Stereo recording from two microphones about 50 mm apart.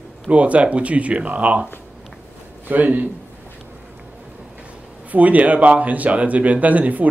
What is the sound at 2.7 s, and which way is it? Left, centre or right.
Speech, right.